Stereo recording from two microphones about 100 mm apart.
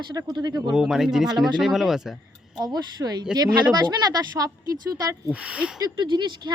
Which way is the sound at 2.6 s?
45° right (ahead or behind).